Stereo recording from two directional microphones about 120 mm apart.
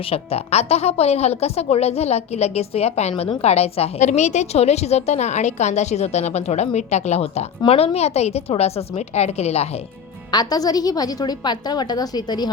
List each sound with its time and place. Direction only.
0.0 s a woman's voice: 55° left (ahead or behind)
10.3 s a woman's voice: 35° left (ahead or behind)